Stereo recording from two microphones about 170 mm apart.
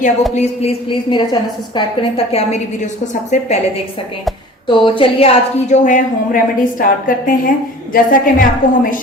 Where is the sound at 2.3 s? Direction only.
40° left (ahead or behind).